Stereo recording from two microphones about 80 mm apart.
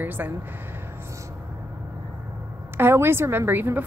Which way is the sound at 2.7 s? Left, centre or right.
Right.